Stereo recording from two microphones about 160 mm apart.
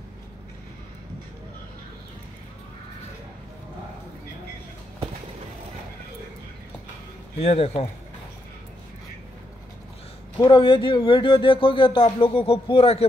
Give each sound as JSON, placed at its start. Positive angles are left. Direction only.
{"t": 7.3, "sound": "speech", "side_deg": 40}
{"t": 10.5, "sound": "speech", "side_deg": 35}